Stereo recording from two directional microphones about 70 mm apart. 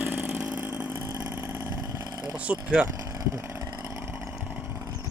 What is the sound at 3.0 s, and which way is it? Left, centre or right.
Vehicle, right.